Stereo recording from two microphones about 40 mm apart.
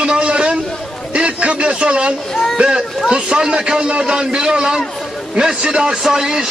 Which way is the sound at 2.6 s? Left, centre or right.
Centre.